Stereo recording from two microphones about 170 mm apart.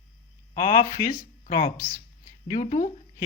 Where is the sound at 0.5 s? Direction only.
25° left (ahead or behind).